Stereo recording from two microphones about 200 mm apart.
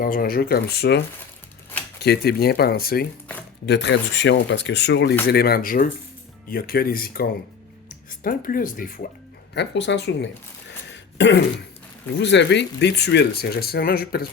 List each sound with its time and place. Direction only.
0.0 s speech: 45° left (ahead or behind)
3.7 s speech: 60° left (ahead or behind); by 9.0 s 45° left (ahead or behind)
9.6 s speech: 60° left (ahead or behind)